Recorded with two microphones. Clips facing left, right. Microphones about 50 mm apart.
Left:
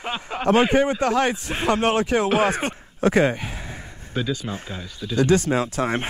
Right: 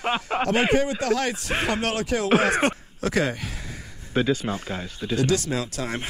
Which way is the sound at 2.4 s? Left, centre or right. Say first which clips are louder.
Even; right.